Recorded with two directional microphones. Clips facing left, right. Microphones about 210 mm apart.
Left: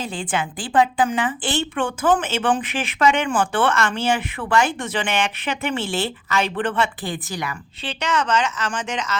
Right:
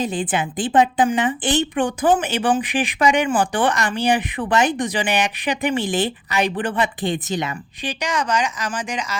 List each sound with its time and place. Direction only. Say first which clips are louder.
0.0 s a woman's voice: right 4 dB; 20° right (ahead or behind)